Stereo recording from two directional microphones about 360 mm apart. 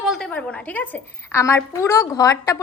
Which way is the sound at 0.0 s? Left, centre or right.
Centre.